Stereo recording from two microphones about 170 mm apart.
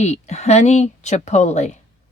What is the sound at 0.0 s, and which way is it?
Speech, 40° left (ahead or behind).